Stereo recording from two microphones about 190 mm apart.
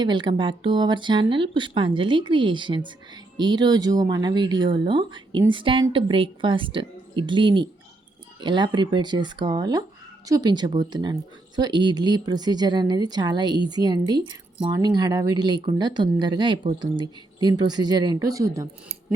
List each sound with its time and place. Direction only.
0.0 s speech: 25° right (ahead or behind)